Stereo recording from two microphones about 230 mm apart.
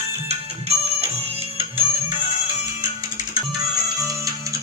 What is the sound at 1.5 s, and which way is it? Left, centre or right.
Music, right.